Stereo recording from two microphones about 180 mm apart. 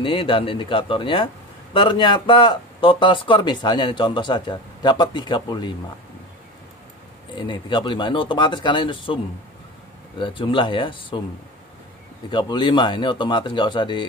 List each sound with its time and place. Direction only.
0.0 s a man's voice: 30° left (ahead or behind)
7.3 s a man's voice: 25° left (ahead or behind)
12.3 s a man's voice: 25° left (ahead or behind)